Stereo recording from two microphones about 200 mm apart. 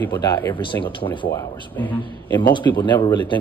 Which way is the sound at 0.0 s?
15° left (ahead or behind).